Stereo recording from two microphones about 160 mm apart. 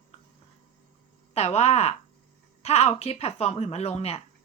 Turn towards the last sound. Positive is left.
turn(degrees=40)  # may be behind; listen again after turning